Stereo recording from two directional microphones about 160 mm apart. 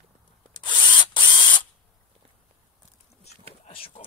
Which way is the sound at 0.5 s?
30° left (ahead or behind).